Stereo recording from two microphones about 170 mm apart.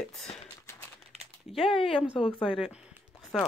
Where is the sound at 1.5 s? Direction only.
30° left (ahead or behind).